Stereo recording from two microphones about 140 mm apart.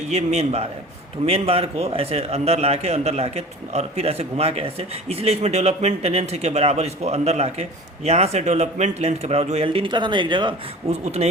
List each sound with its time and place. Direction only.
0.1 s a man's voice: 50° right (ahead or behind); by 10.5 s 35° right (ahead or behind)
10.8 s a man's voice: 50° right (ahead or behind)